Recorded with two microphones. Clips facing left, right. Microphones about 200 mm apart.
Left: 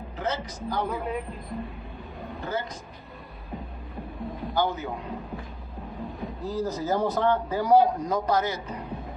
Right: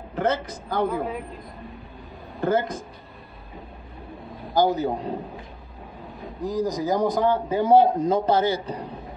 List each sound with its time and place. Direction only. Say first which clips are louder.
0.1 s speech: right 7 dB; 55° right (ahead or behind)
2.4 s speech: right 10 dB; 50° right (ahead or behind)
4.6 s a man's voice: right 7 dB; 35° right (ahead or behind)
6.4 s speech: right 5 dB; 15° right (ahead or behind)
7.4 s a man's voice: right 4 dB; 25° right (ahead or behind)